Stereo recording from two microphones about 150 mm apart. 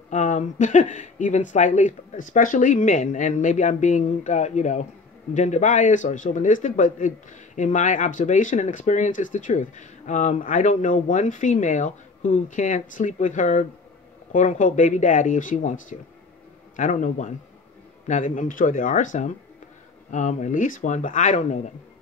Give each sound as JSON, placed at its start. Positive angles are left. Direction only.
{"t": 0.1, "sound": "a man's voice", "side_deg": 55}